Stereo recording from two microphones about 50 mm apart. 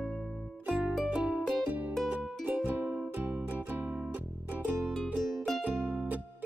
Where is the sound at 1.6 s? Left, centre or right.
Right.